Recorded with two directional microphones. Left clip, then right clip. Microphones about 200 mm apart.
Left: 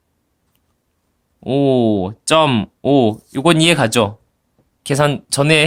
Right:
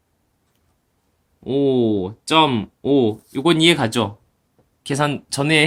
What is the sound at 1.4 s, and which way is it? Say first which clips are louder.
Speech: left 3 dB; 45° left (ahead or behind).